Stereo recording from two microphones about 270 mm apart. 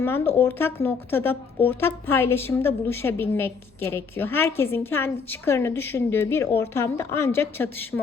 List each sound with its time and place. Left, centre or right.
0.0 s a woman's voice: centre